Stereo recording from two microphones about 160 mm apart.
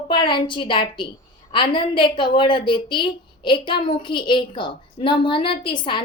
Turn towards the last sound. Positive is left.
turn(degrees=30)  # may be behind; listen again after turning